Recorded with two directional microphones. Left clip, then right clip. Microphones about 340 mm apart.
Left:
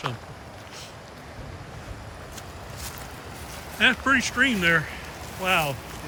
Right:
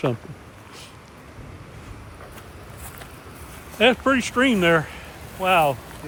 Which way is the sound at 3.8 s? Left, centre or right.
Centre.